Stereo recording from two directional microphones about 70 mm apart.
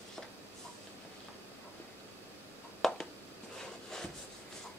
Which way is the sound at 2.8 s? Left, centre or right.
Centre.